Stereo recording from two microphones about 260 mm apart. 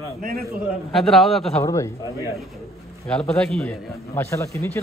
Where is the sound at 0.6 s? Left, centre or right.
Centre.